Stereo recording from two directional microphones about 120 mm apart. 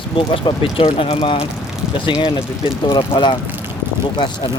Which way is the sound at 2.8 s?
45° left (ahead or behind).